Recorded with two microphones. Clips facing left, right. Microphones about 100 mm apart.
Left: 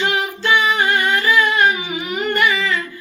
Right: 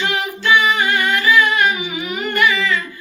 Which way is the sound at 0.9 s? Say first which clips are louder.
Right 1 dB; 20° left (ahead or behind).